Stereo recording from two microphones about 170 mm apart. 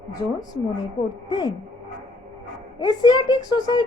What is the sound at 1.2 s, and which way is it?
Speech, 25° left (ahead or behind).